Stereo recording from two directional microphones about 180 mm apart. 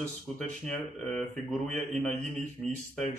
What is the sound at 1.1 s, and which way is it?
Speech, centre (ahead or behind).